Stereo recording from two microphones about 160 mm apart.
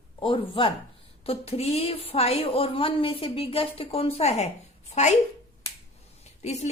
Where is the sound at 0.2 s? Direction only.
30° left (ahead or behind).